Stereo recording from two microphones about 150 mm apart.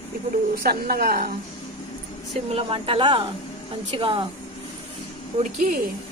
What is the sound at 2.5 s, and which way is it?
Speech, 40° right (ahead or behind).